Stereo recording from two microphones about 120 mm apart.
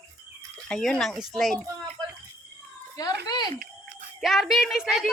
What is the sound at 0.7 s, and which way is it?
Speech, 5° left (ahead or behind).